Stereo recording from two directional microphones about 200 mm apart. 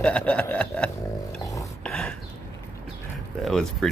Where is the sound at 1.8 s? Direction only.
5° left (ahead or behind).